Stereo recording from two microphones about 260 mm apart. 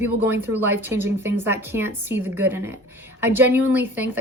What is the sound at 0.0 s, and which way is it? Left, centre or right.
Speech, centre.